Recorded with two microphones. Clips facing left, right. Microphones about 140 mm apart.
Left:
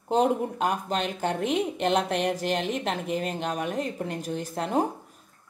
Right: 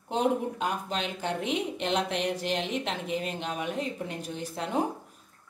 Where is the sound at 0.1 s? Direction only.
45° left (ahead or behind).